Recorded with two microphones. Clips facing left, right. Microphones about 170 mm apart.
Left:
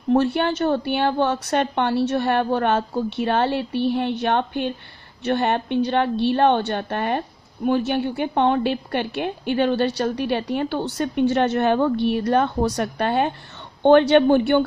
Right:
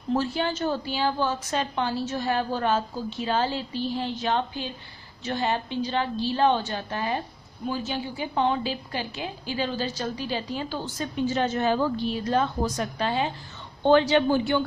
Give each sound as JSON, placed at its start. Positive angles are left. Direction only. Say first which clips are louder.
{"t": 0.1, "sound": "a woman's voice", "louder": "left 7 dB", "side_deg": 60}